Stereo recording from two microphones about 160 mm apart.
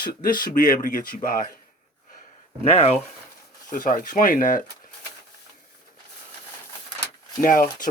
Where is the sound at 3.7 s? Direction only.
55° left (ahead or behind).